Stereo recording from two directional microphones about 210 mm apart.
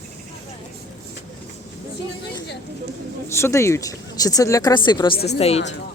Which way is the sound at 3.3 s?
15° left (ahead or behind).